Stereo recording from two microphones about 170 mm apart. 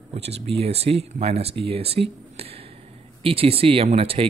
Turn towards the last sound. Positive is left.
turn(degrees=-35)  # may be behind; listen again after turning